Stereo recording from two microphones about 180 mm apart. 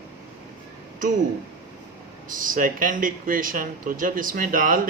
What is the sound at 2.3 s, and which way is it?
A man's voice, 50° right (ahead or behind).